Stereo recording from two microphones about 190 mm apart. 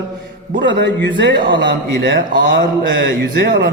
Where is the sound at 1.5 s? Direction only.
70° right (ahead or behind).